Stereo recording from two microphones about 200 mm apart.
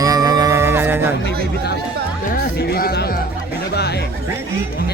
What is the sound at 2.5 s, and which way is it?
Speech, 55° left (ahead or behind).